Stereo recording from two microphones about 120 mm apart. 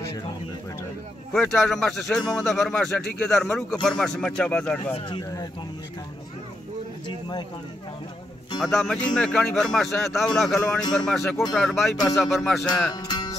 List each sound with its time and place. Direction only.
1.3 s speech: 5° left (ahead or behind)
8.5 s speech: centre (ahead or behind)
12.9 s music: 35° left (ahead or behind)